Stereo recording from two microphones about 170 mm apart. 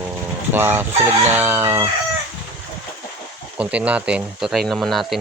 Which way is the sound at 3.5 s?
5° right (ahead or behind).